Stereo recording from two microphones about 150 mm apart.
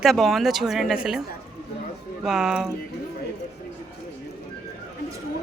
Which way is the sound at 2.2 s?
5° right (ahead or behind).